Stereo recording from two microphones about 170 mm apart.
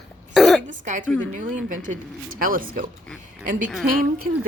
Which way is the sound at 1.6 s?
50° right (ahead or behind).